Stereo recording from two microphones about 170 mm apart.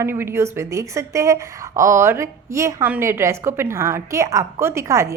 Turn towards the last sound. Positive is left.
turn(degrees=-15)  # may be behind; listen again after turning